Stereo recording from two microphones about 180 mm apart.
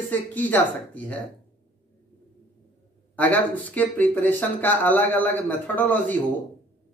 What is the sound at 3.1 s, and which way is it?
Speech, 10° left (ahead or behind).